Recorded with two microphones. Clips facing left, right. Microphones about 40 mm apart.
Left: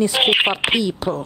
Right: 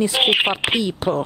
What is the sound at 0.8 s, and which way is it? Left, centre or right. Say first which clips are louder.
Speech: right 1 dB; right.